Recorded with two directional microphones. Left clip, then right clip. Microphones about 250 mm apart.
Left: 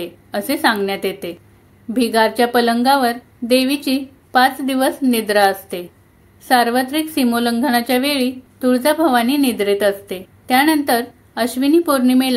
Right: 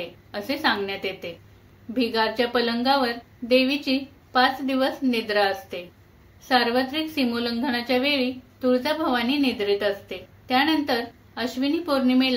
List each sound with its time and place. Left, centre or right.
0.3 s a woman's voice: left